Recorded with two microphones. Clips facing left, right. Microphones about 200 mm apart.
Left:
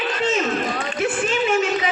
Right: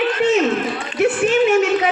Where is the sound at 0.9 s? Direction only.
70° right (ahead or behind).